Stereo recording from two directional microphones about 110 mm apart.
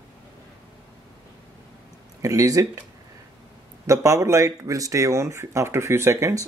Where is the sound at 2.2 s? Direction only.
30° right (ahead or behind).